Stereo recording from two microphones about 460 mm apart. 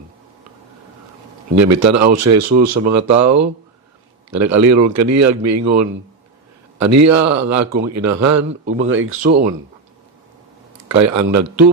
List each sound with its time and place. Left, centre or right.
1.5 s speech: right; by 9.5 s centre
10.8 s speech: right